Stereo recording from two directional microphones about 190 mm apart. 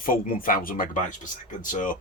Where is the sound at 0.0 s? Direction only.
50° left (ahead or behind).